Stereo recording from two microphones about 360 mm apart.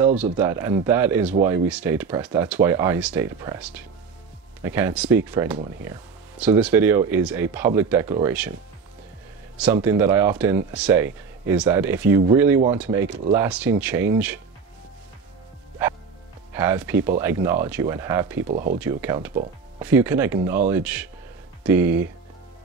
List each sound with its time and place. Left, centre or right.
0.0 s speech: centre
4.6 s speech: centre
9.6 s a man's voice: centre
16.5 s speech: centre
18.5 s speech: right
18.8 s speech: centre